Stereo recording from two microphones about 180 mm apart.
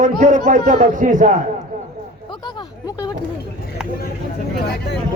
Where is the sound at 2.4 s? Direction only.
25° left (ahead or behind).